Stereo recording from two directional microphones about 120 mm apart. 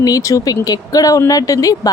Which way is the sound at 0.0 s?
30° left (ahead or behind).